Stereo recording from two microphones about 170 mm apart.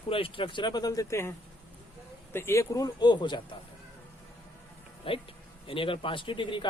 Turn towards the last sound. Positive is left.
turn(degrees=30)  # may be behind; listen again after turning